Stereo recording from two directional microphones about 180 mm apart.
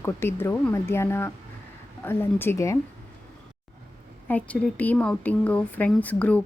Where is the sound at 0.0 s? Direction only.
15° left (ahead or behind).